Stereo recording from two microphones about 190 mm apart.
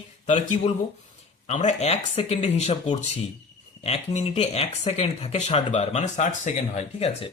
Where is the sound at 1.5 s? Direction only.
35° left (ahead or behind).